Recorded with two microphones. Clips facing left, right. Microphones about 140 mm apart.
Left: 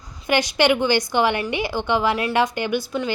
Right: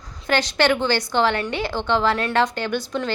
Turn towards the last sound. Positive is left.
turn(degrees=10)  # may be behind; listen again after turning